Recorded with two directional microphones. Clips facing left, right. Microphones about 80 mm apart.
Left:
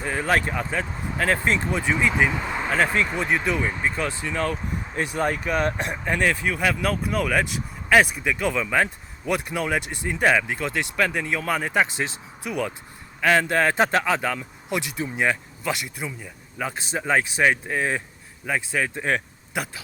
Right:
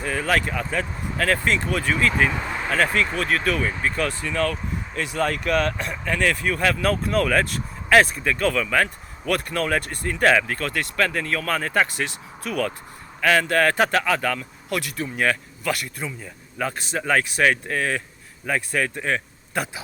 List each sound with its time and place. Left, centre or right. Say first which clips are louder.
0.0 s speech: even; left
5.4 s speech: right 2 dB; centre
5.6 s speech: left 1 dB; left
6.4 s speech: right 2 dB; centre